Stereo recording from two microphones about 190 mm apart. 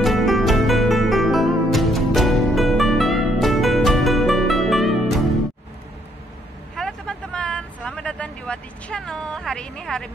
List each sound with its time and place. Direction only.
0.0 s music: centre (ahead or behind)
6.8 s vehicle: 5° left (ahead or behind)